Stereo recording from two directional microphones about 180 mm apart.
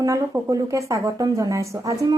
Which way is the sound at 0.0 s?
20° right (ahead or behind).